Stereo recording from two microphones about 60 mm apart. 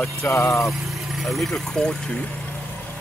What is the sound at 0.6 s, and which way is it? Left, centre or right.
Speech, centre.